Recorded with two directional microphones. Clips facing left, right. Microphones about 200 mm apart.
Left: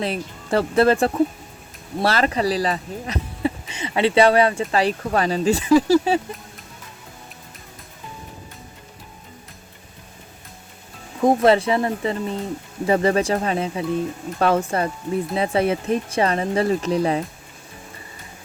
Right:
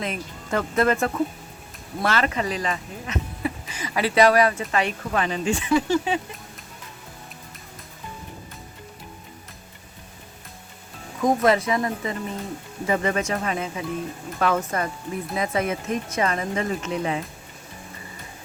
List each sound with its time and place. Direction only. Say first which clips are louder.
0.0 s speech: left 5 dB; 35° left (ahead or behind)
11.2 s speech: left 4 dB; 30° left (ahead or behind)